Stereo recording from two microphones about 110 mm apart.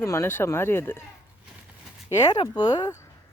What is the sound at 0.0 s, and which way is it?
Speech, 25° left (ahead or behind).